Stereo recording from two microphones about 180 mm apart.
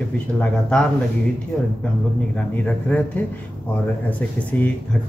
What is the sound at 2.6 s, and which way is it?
Speech, 5° left (ahead or behind).